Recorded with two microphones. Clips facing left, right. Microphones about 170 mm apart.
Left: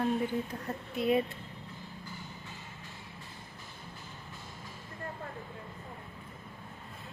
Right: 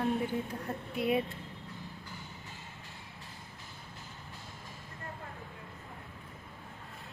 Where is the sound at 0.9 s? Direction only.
5° right (ahead or behind).